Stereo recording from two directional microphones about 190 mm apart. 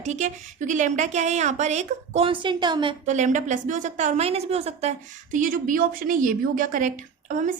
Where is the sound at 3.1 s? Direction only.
40° right (ahead or behind).